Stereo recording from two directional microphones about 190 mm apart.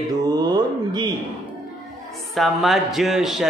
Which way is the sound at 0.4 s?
20° right (ahead or behind).